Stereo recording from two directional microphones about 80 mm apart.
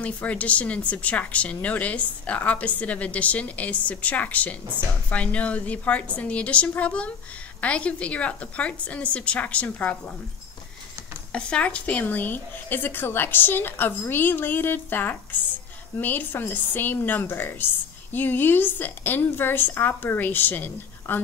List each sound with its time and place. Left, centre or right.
0.0 s speech: centre
11.3 s speech: centre